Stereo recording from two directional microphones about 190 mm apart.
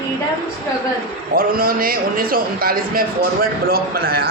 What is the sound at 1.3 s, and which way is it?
A man's voice, 50° right (ahead or behind).